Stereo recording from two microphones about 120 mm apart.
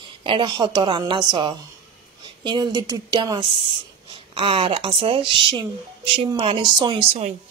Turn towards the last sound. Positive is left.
turn(degrees=-40)  # may be behind; listen again after turning